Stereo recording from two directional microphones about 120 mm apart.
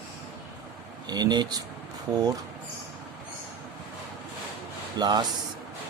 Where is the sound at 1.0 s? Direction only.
35° right (ahead or behind).